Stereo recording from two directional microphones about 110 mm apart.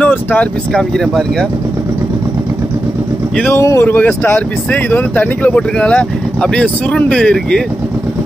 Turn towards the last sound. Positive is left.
turn(degrees=10)  # may be behind; listen again after turning